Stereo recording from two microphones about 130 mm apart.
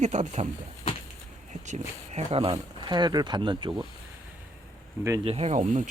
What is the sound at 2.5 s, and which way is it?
Speech, 35° right (ahead or behind).